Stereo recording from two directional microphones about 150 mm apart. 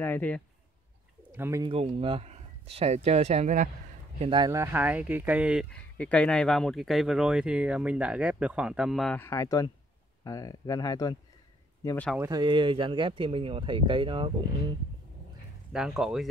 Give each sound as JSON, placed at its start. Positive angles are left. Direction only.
{"t": 0.0, "sound": "a man's voice", "side_deg": 10}
{"t": 1.3, "sound": "speech", "side_deg": -15}
{"t": 1.6, "sound": "speech", "side_deg": -40}
{"t": 4.2, "sound": "speech", "side_deg": -30}
{"t": 4.5, "sound": "speech", "side_deg": -15}
{"t": 5.7, "sound": "speech", "side_deg": 10}
{"t": 9.2, "sound": "speech", "side_deg": 20}
{"t": 12.2, "sound": "speech", "side_deg": -25}
{"t": 15.7, "sound": "speech", "side_deg": -5}